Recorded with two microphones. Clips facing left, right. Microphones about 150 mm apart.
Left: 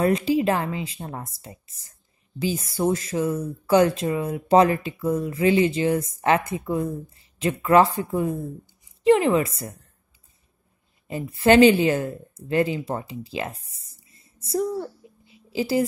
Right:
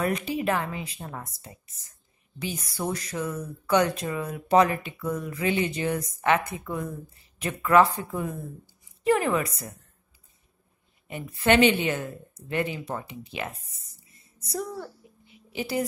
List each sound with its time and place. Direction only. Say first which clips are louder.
0.0 s speech: left 6 dB; 30° left (ahead or behind)
11.1 s a woman's voice: left 5 dB; 30° left (ahead or behind)